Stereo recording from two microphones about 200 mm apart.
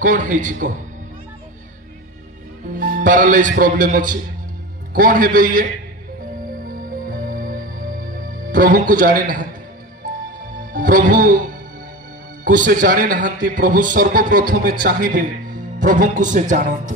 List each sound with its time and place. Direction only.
0.0 s a man's voice: 40° right (ahead or behind)
2.7 s a man's voice: 45° right (ahead or behind)
6.7 s music: 45° right (ahead or behind)
8.5 s a man's voice: 40° right (ahead or behind)
10.7 s a man's voice: 40° right (ahead or behind)